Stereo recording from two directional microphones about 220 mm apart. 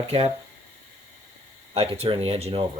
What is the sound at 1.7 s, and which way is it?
Speech, 30° right (ahead or behind).